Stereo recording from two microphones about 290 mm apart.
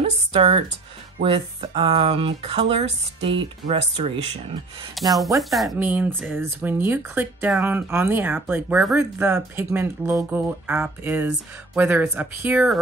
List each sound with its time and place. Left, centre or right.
0.0 s speech: centre
5.0 s speech: centre